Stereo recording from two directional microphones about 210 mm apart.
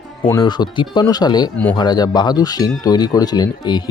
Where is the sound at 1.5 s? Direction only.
10° left (ahead or behind).